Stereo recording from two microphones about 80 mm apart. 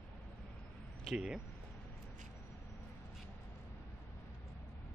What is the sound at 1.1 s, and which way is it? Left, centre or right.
Speech, centre.